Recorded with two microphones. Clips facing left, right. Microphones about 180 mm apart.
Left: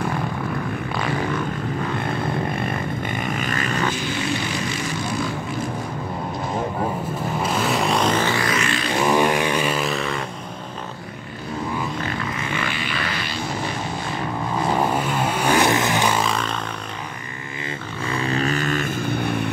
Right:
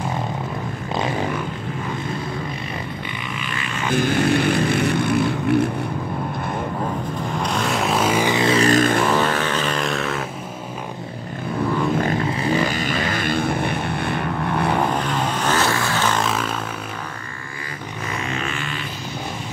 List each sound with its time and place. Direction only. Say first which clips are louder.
2.5 s vehicle: left 4 dB; 55° left (ahead or behind)
3.9 s vehicle: right 7 dB; 55° right (ahead or behind)
7.3 s vehicle: left 1 dB; 5° left (ahead or behind); by 8.5 s 20° right (ahead or behind)
8.5 s music: right 7 dB; 40° right (ahead or behind)
9.0 s vehicle: left 1 dB; 15° left (ahead or behind)
12.2 s vehicle: right 7 dB; 35° right (ahead or behind); by 14.7 s 65° right (ahead or behind)
14.7 s vehicle: even; 10° left (ahead or behind)
16.2 s vehicle: right 1 dB; 5° right (ahead or behind)
18.1 s vehicle: left 6 dB; 35° left (ahead or behind); by 19.4 s 60° left (ahead or behind)